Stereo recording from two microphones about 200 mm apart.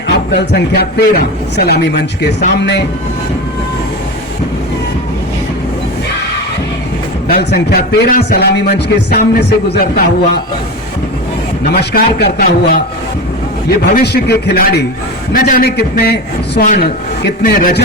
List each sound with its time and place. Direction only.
0.3 s speech: 55° left (ahead or behind)
7.3 s speech: 50° left (ahead or behind)
11.7 s speech: 55° left (ahead or behind)
16.6 s speech: 40° left (ahead or behind)